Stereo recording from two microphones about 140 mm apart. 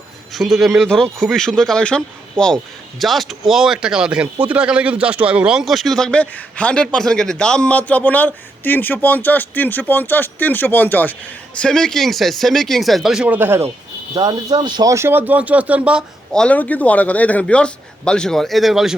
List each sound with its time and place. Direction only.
0.3 s speech: centre (ahead or behind)
16.3 s a man's voice: 10° left (ahead or behind)